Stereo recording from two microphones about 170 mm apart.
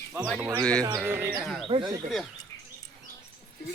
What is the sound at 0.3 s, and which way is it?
Speech, 10° right (ahead or behind).